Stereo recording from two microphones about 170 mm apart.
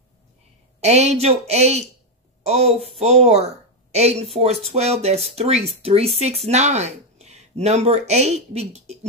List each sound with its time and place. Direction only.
0.7 s speech: 40° right (ahead or behind)